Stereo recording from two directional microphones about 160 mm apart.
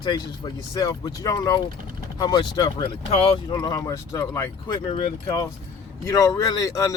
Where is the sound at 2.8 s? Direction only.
35° left (ahead or behind); by 4.7 s 20° left (ahead or behind).